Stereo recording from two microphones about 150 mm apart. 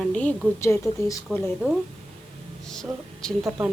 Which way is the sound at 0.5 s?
20° left (ahead or behind).